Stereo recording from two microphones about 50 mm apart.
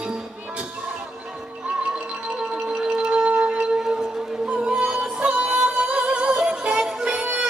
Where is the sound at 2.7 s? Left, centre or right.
Centre.